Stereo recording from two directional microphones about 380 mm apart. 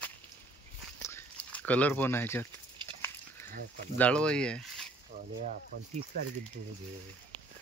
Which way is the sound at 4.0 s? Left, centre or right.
Centre.